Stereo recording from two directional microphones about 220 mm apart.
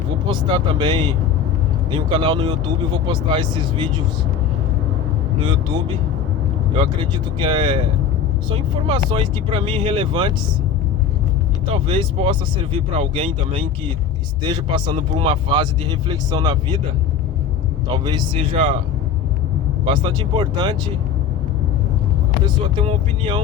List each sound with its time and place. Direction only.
0.3 s speech: 20° right (ahead or behind)
5.4 s speech: 20° right (ahead or behind)
11.6 s speech: 20° right (ahead or behind)
17.8 s speech: 20° right (ahead or behind)
19.8 s speech: 20° right (ahead or behind)
22.4 s speech: 25° right (ahead or behind)